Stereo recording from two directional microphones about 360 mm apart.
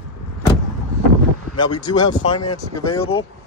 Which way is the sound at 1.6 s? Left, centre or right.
Left.